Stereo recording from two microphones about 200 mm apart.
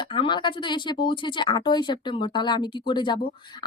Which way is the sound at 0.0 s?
25° left (ahead or behind).